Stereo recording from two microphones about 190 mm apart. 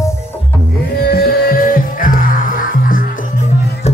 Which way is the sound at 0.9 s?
50° left (ahead or behind).